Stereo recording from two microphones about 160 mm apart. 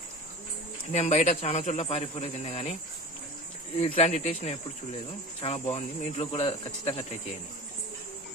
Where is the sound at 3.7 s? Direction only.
40° left (ahead or behind).